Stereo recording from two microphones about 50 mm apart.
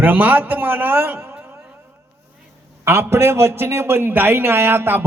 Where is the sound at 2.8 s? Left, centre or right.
Right.